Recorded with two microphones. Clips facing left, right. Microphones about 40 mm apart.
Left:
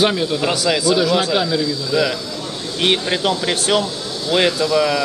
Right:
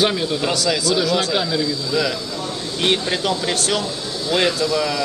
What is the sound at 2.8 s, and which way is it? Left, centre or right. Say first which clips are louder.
Speech: left 2 dB; centre.